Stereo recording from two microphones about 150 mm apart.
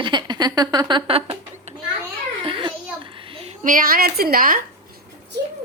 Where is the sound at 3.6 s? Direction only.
70° right (ahead or behind).